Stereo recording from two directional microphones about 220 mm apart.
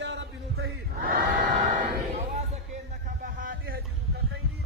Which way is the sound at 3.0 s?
40° right (ahead or behind).